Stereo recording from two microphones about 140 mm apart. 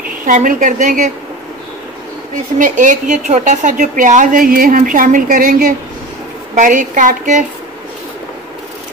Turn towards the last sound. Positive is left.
turn(degrees=-60)  # may be behind; listen again after turning